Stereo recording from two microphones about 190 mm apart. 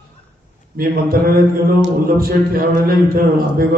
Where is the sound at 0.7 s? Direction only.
50° right (ahead or behind).